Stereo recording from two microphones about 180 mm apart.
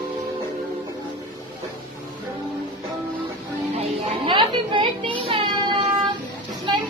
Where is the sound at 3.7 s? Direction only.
30° right (ahead or behind).